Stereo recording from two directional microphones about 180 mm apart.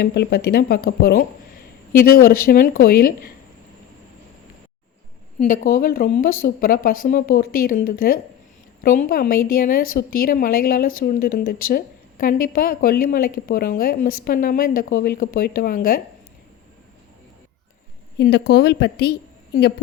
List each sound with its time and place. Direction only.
0.0 s a woman's voice: 60° left (ahead or behind)
5.5 s a woman's voice: 50° left (ahead or behind)
18.2 s speech: 70° left (ahead or behind)